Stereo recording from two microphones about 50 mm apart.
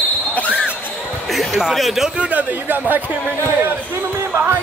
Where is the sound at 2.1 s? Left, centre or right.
Right.